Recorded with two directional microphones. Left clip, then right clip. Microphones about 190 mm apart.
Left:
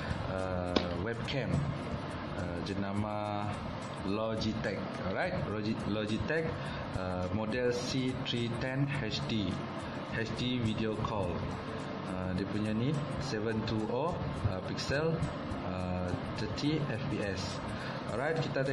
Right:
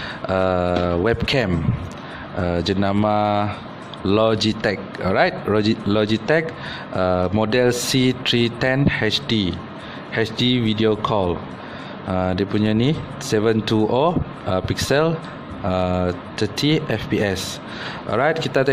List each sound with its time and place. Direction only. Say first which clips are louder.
0.3 s speech: right 16 dB; 60° right (ahead or behind)
16.3 s speech: right 15 dB; 60° right (ahead or behind)